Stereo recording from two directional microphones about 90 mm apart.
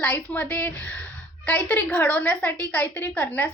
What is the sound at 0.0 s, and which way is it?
A woman's voice, 20° left (ahead or behind).